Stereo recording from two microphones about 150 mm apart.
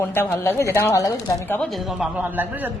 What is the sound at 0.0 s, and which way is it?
Speech, 15° left (ahead or behind).